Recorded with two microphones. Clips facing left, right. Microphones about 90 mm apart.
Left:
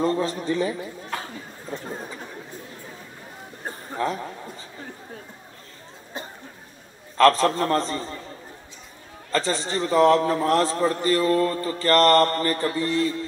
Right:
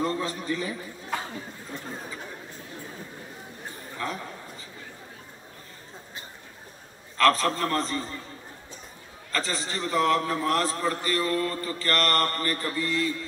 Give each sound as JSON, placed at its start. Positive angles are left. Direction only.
{"t": 0.0, "sound": "a man's voice", "side_deg": 25}
{"t": 4.0, "sound": "a man's voice", "side_deg": 30}
{"t": 7.2, "sound": "a man's voice", "side_deg": 25}
{"t": 9.3, "sound": "a man's voice", "side_deg": 25}